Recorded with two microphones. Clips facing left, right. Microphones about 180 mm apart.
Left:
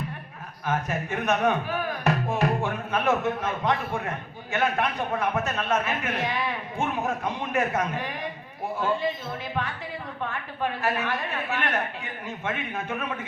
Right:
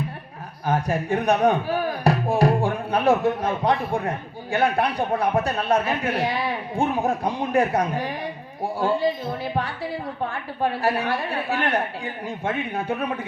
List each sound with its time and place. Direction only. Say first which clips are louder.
0.6 s a man's voice: right 5 dB; 35° right (ahead or behind)